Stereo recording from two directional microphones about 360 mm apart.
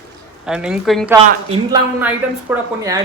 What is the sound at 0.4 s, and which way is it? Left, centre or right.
A man's voice, centre.